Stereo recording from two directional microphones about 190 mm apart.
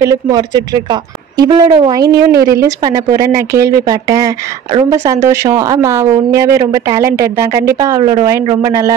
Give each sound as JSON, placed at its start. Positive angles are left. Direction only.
{"t": 0.0, "sound": "a woman's voice", "side_deg": -20}